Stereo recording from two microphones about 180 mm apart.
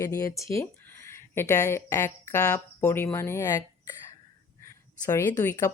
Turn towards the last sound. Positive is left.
turn(degrees=15)  # may be behind; listen again after turning